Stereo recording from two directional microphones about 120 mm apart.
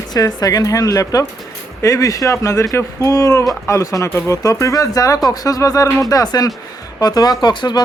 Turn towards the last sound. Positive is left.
turn(degrees=35)  # may be behind; listen again after turning